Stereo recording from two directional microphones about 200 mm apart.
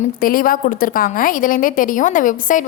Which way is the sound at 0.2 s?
45° left (ahead or behind).